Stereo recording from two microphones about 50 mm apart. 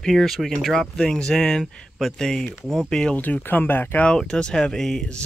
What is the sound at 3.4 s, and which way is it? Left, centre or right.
Speech, left.